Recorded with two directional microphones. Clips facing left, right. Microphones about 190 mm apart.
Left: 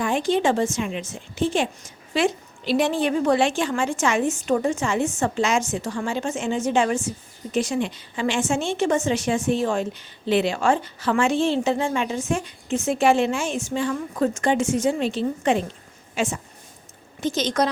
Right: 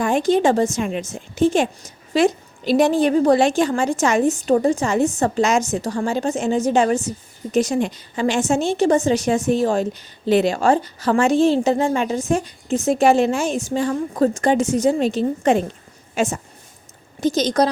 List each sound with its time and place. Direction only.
0.0 s a woman's voice: 45° right (ahead or behind)